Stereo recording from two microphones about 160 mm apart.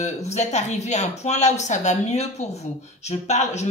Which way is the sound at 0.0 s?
45° left (ahead or behind).